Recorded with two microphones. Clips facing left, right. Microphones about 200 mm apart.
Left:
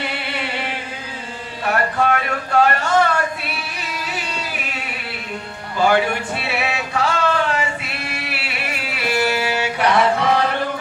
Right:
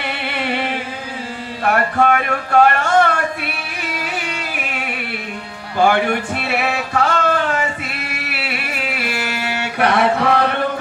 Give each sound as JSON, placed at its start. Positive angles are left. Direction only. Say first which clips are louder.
{"t": 1.6, "sound": "a sound", "louder": "right 3 dB", "side_deg": -55}
{"t": 5.8, "sound": "music", "louder": "right 2 dB", "side_deg": -55}
{"t": 9.6, "sound": "chant", "louder": "right 3 dB", "side_deg": -55}